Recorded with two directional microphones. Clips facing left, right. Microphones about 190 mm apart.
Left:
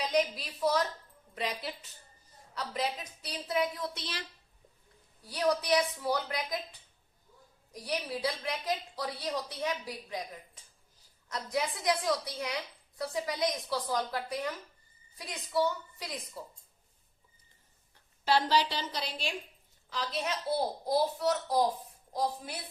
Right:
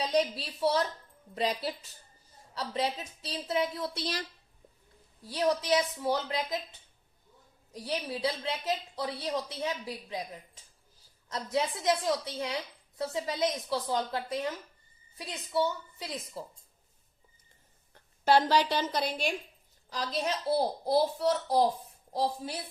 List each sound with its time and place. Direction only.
0.0 s a woman's voice: 30° right (ahead or behind)
5.3 s a woman's voice: 25° right (ahead or behind)
8.2 s a woman's voice: 25° right (ahead or behind)
17.9 s a woman's voice: 45° right (ahead or behind)
19.9 s a child's voice: 40° right (ahead or behind)